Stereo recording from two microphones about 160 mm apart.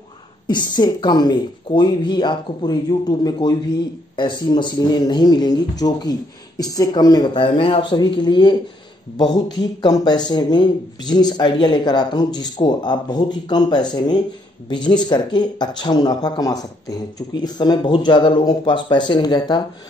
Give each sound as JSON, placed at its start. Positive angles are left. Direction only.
{"t": 0.5, "sound": "speech", "side_deg": 25}